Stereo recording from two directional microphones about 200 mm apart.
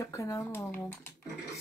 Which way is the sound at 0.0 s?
15° left (ahead or behind).